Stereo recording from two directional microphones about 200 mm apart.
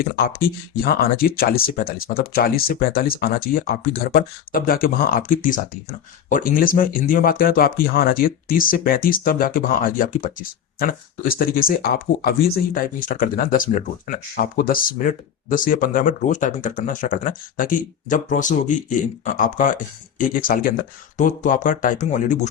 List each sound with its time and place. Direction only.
0.3 s speech: 50° left (ahead or behind)